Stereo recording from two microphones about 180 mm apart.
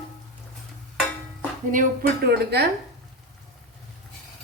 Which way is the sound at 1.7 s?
55° right (ahead or behind).